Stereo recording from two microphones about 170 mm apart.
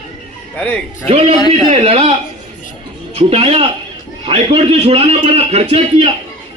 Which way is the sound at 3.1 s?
35° right (ahead or behind).